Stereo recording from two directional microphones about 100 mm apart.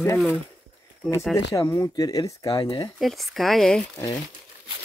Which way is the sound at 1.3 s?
30° left (ahead or behind).